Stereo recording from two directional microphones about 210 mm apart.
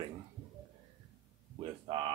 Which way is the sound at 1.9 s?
25° right (ahead or behind).